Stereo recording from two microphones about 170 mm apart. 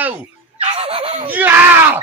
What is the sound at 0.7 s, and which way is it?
Speech, 35° right (ahead or behind).